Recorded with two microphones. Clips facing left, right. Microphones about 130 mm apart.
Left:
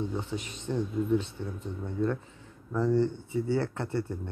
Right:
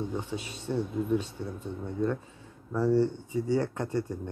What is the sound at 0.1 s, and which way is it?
Speech, 15° right (ahead or behind).